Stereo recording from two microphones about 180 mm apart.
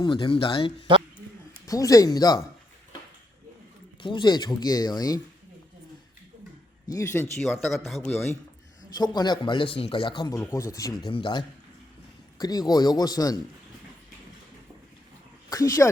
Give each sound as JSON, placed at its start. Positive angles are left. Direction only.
{"t": 0.0, "sound": "speech", "side_deg": 30}
{"t": 1.6, "sound": "speech", "side_deg": 20}
{"t": 4.0, "sound": "speech", "side_deg": 25}
{"t": 6.8, "sound": "speech", "side_deg": 15}
{"t": 7.9, "sound": "a man's voice", "side_deg": 0}
{"t": 9.0, "sound": "speech", "side_deg": 25}
{"t": 15.4, "sound": "speech", "side_deg": 20}